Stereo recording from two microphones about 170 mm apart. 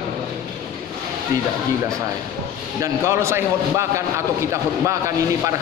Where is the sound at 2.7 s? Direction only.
15° right (ahead or behind).